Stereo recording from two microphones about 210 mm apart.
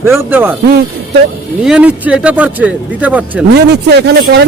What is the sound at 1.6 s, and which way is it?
Speech, 5° right (ahead or behind).